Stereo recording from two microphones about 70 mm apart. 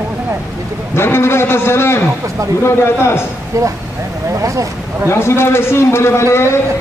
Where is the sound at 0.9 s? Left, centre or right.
Left.